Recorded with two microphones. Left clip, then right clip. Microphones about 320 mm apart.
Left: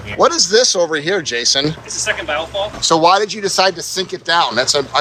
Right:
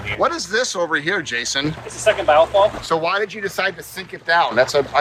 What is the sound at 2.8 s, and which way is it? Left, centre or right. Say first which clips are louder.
Speech: left 8 dB; centre.